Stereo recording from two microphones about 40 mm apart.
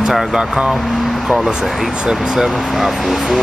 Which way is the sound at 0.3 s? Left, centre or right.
Right.